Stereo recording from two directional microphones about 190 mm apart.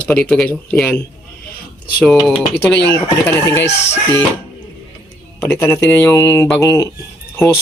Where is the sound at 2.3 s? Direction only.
10° left (ahead or behind).